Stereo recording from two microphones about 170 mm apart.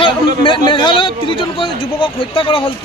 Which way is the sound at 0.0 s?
30° left (ahead or behind).